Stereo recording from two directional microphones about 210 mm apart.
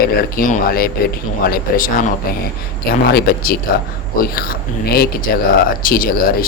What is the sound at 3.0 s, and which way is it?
Speech, 45° left (ahead or behind).